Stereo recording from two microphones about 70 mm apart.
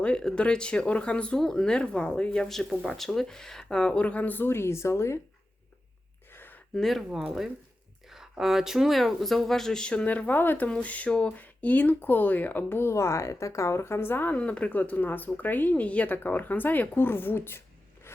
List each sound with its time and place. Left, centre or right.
0.0 s speech: centre; by 5.2 s left
6.3 s gasp: left
6.7 s speech: centre; by 14.3 s left
14.3 s speech: centre